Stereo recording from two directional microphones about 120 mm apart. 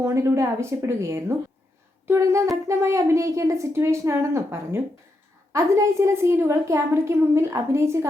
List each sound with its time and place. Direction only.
0.0 s speech: 25° right (ahead or behind)